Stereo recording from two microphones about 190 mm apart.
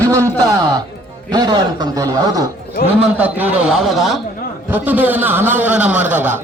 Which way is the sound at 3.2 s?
10° right (ahead or behind).